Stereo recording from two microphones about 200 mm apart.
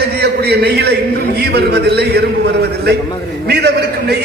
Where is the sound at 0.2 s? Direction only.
55° right (ahead or behind).